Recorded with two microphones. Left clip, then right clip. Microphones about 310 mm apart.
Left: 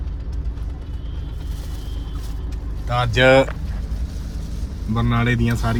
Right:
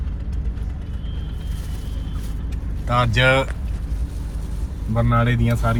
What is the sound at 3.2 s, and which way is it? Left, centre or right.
Speech, left.